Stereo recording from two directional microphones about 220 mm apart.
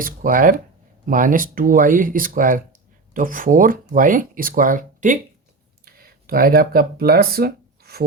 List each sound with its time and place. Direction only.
0.0 s speech: 40° right (ahead or behind)